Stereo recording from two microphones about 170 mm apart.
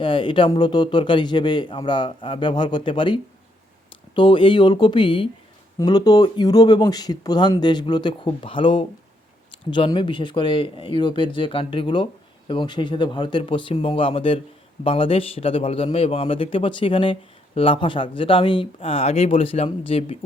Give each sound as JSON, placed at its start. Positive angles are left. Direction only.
{"t": 0.0, "sound": "a man's voice", "side_deg": 30}